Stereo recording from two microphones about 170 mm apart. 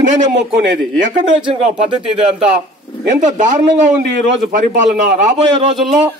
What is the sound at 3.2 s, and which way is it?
Speech, 45° right (ahead or behind).